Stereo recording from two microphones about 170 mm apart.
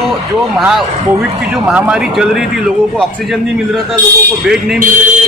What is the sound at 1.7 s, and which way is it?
Speech, 5° right (ahead or behind).